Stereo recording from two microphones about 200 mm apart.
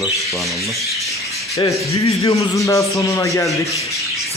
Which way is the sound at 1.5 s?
15° left (ahead or behind).